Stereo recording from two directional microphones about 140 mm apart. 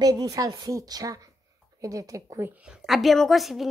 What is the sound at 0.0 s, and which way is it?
A woman's voice, 25° right (ahead or behind).